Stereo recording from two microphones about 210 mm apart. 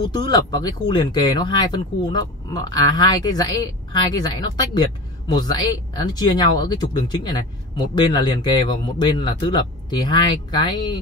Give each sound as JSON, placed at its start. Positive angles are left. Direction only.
{"t": 0.1, "sound": "speech", "side_deg": 20}